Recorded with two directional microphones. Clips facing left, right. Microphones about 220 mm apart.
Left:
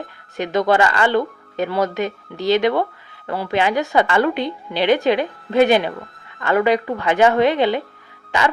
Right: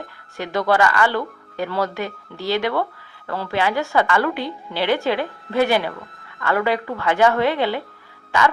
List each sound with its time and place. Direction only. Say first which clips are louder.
0.3 s a woman's voice: left 2 dB; 20° left (ahead or behind)